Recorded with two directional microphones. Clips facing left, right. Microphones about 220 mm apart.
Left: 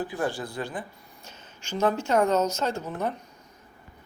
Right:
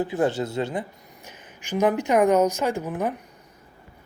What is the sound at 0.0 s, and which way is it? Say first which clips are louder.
Speech: right 6 dB; 25° right (ahead or behind).